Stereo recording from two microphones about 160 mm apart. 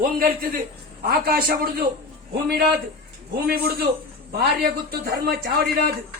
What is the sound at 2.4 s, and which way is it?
Speech, 90° right.